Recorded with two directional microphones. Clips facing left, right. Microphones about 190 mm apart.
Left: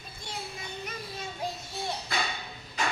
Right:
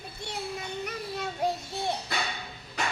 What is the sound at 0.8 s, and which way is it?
Child singing, 65° right (ahead or behind).